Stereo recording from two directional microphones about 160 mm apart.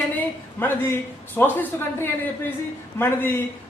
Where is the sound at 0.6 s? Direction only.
15° left (ahead or behind).